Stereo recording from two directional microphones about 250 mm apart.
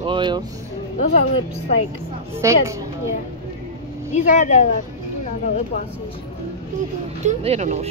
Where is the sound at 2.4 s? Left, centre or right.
Centre.